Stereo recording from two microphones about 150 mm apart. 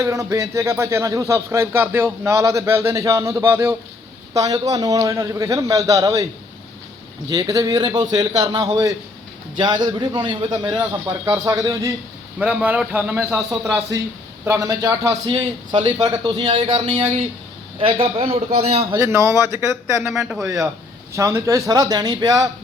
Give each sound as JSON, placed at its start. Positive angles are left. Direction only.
{"t": 0.0, "sound": "a man's voice", "side_deg": -20}
{"t": 7.3, "sound": "a man's voice", "side_deg": -25}
{"t": 12.4, "sound": "a man's voice", "side_deg": -10}
{"t": 15.3, "sound": "a man's voice", "side_deg": -30}
{"t": 18.9, "sound": "speech", "side_deg": -15}
{"t": 20.0, "sound": "speech", "side_deg": -5}
{"t": 21.1, "sound": "a man's voice", "side_deg": -20}